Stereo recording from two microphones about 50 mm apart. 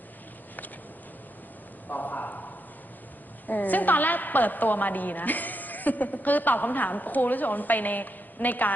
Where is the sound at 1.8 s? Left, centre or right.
Left.